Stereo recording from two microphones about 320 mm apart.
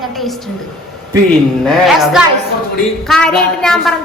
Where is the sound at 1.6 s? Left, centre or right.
Centre.